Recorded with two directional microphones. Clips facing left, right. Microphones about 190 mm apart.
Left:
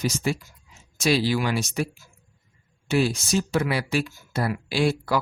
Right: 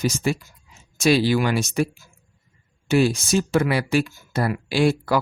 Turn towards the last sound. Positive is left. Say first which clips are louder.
# right 4 dB
turn(degrees=-55)  # may be behind; listen again after turning